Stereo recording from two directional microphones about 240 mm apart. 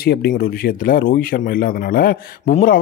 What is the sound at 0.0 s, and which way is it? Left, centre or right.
Speech, left.